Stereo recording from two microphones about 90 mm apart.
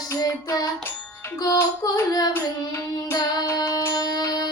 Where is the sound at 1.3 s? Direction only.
45° left (ahead or behind).